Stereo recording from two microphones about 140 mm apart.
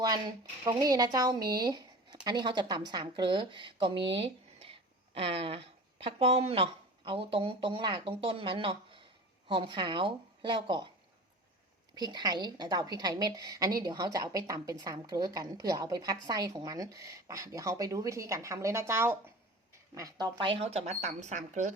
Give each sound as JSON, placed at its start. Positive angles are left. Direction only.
{"t": 0.6, "sound": "a woman's voice", "side_deg": -30}
{"t": 11.9, "sound": "a woman's voice", "side_deg": -30}